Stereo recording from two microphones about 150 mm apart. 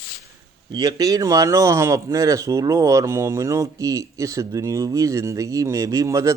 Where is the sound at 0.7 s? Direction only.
25° right (ahead or behind).